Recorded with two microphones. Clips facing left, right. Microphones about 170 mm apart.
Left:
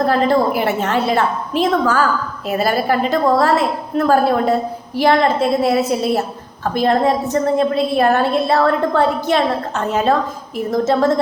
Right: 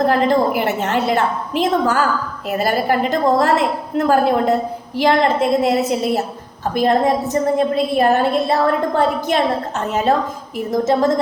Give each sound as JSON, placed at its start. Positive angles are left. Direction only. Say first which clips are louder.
{"t": 0.0, "sound": "a woman's voice", "louder": "even", "side_deg": -15}